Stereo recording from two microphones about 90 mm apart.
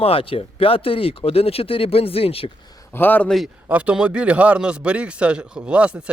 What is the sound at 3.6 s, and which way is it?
Speech, 15° right (ahead or behind).